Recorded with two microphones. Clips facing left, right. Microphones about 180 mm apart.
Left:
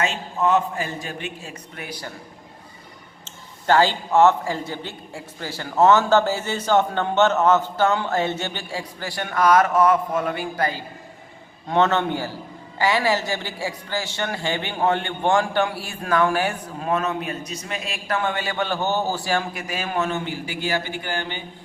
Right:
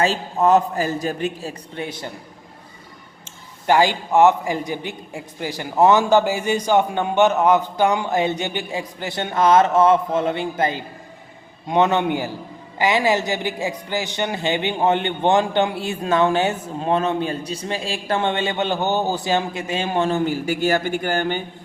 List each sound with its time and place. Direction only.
0.0 s a man's voice: 35° right (ahead or behind)
3.2 s a man's voice: 15° right (ahead or behind); by 21.4 s 45° right (ahead or behind)